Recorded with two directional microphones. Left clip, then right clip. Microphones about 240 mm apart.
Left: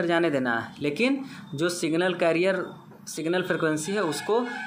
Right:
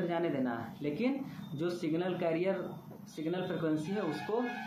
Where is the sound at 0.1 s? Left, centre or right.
Left.